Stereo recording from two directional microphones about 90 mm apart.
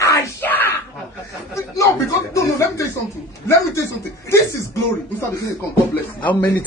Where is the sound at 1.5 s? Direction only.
35° left (ahead or behind).